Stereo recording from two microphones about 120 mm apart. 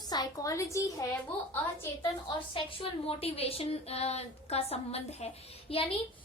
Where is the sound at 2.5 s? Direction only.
50° left (ahead or behind).